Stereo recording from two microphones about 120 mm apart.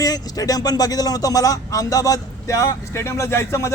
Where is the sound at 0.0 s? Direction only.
30° left (ahead or behind).